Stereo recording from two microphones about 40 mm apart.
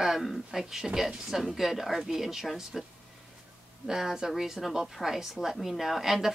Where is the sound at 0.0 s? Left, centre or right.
Centre.